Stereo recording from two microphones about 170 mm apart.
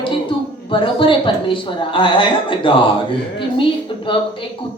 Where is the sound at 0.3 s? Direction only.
30° left (ahead or behind).